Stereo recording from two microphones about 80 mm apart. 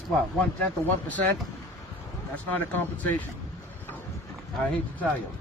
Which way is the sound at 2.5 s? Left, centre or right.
Centre.